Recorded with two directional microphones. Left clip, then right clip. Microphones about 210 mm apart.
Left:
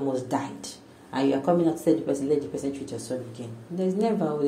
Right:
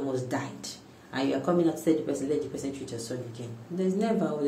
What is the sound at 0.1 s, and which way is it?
Speech, 15° left (ahead or behind).